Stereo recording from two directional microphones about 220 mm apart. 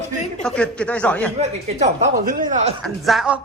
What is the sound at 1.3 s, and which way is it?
Speech, 30° right (ahead or behind).